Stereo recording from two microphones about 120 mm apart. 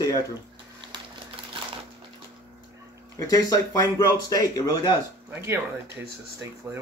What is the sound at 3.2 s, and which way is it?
A man's voice, 30° left (ahead or behind).